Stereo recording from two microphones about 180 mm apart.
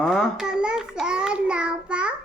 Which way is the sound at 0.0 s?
Centre (ahead or behind).